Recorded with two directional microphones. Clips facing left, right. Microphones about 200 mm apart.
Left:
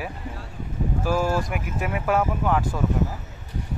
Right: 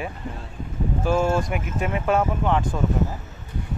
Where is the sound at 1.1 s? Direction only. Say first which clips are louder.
Right 2 dB; 25° right (ahead or behind).